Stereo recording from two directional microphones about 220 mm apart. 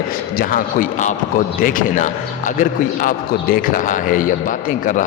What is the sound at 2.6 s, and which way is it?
A man's voice, 40° left (ahead or behind).